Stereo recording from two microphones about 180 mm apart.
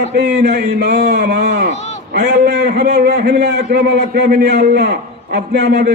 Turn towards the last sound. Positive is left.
turn(degrees=-65)  # may be behind; listen again after turning